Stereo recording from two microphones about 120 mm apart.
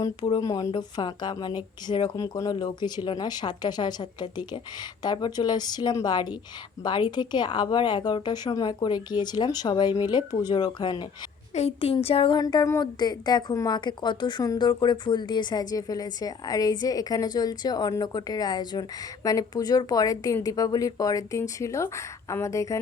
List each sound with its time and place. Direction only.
0.0 s a woman's voice: 35° left (ahead or behind)
11.5 s speech: 60° left (ahead or behind)
12.4 s a woman's voice: 35° left (ahead or behind)